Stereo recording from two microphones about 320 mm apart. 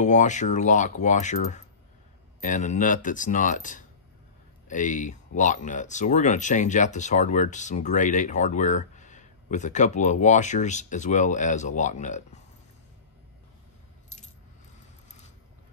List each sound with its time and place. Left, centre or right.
0.0 s speech: left